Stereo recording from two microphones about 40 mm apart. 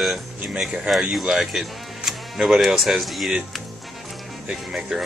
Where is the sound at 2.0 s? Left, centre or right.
Centre.